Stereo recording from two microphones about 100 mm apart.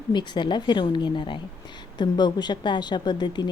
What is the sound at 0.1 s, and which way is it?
A woman's voice, 50° left (ahead or behind).